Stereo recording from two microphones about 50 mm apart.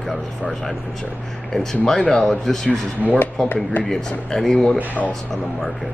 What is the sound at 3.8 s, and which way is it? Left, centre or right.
Speech, left.